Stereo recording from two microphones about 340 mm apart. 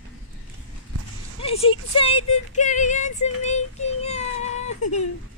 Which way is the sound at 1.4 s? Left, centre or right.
Centre.